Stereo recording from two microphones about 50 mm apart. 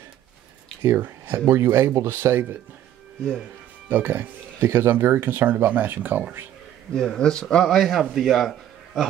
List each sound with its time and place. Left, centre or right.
1.0 s speech: right
2.0 s speech: right
3.9 s speech: right
6.9 s speech: centre